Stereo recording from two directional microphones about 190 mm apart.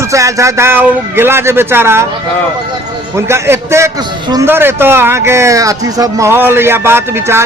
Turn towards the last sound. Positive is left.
turn(degrees=-10)  # may be behind; listen again after turning